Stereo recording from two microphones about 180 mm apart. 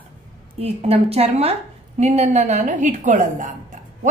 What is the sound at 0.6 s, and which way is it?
A woman's voice, 35° right (ahead or behind).